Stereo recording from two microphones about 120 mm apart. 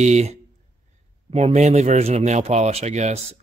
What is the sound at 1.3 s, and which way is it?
Speech, 60° right (ahead or behind).